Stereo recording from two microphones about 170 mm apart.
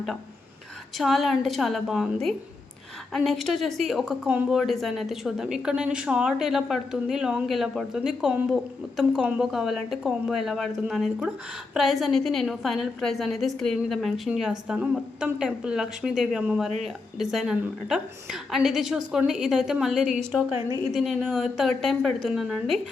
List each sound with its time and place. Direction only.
0.9 s speech: centre (ahead or behind)